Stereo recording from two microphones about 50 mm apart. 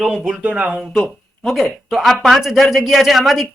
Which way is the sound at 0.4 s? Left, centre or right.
Right.